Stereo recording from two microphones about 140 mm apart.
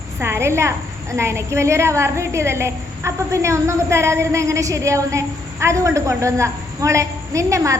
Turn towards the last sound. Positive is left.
turn(degrees=-20)  # may be behind; listen again after turning